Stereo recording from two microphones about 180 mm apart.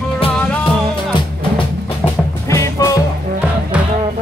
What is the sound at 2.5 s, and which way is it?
Music, 20° left (ahead or behind).